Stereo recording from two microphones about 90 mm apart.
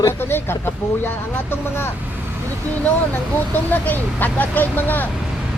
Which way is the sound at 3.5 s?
20° left (ahead or behind).